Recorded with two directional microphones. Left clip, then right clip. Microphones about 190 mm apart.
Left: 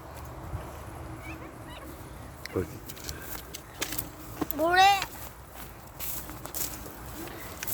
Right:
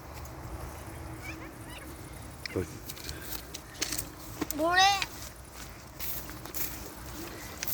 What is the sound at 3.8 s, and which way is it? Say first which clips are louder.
Vehicle: even; 30° left (ahead or behind).